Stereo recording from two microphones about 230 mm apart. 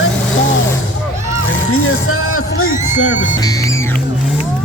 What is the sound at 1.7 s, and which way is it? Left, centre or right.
Music, left.